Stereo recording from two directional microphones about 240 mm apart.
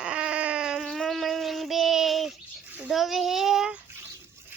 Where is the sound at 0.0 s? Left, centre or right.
Centre.